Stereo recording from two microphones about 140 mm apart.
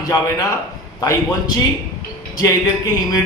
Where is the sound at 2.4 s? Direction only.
25° left (ahead or behind).